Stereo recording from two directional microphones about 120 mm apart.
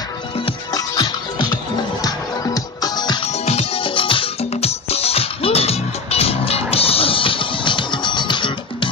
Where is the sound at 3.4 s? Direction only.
55° left (ahead or behind); by 8.5 s 40° left (ahead or behind).